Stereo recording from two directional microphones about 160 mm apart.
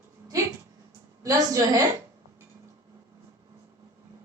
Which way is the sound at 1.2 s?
20° right (ahead or behind).